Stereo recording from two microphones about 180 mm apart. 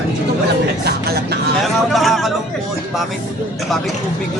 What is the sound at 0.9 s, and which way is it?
Music, 60° right (ahead or behind).